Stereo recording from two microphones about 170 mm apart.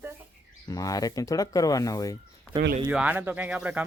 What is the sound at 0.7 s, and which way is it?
Speech, 20° left (ahead or behind).